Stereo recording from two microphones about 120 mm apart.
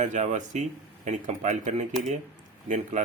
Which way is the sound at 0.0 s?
90° right.